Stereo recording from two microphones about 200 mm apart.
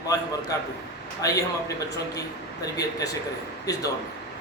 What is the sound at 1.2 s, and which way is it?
Speech, 15° left (ahead or behind).